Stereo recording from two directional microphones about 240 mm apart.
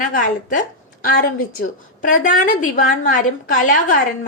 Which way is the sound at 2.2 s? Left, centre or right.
Left.